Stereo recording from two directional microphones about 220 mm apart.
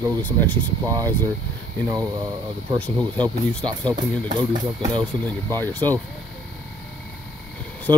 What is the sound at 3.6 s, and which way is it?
Speech, 20° right (ahead or behind).